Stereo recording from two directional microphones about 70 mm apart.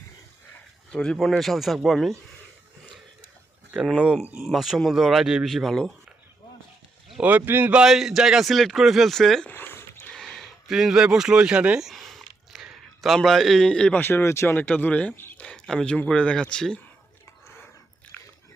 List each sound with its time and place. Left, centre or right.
0.9 s speech: centre
3.9 s speech: centre
4.4 s speech: centre
7.2 s speech: right
7.7 s speech: centre
9.5 s dog: left
10.1 s a sound: centre
13.1 s speech: centre
13.9 s speech: left
14.5 s speech: left
15.1 s a sound: left
15.4 s a sound: centre
16.1 s speech: centre
18.1 s biting: centre